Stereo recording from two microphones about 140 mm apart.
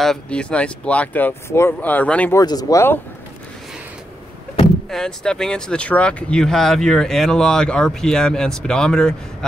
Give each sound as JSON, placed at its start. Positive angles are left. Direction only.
{"t": 0.0, "sound": "speech", "side_deg": 5}
{"t": 2.3, "sound": "speech", "side_deg": 25}
{"t": 4.8, "sound": "speech", "side_deg": 5}